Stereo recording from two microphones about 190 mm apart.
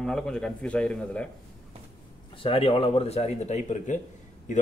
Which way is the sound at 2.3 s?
30° left (ahead or behind).